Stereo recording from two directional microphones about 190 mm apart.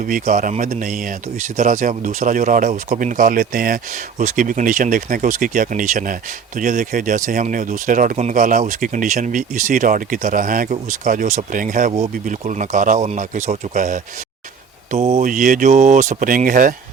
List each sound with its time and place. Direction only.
0.0 s speech: 45° right (ahead or behind)